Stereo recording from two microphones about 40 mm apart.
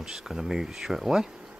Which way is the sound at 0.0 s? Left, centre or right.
Centre.